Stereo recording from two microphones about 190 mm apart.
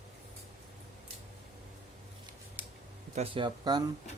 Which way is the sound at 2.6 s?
10° right (ahead or behind).